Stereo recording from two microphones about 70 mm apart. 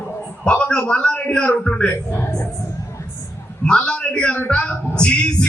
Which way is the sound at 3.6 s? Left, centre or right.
Centre.